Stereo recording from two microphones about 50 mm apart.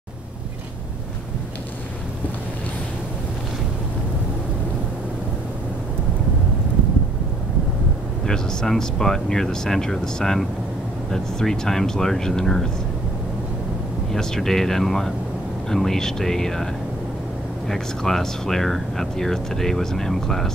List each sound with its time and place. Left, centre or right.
8.3 s speech: centre
14.1 s speech: centre
17.6 s speech: centre